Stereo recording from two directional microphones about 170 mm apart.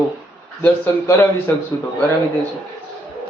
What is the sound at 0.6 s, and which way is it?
Speech, 10° left (ahead or behind).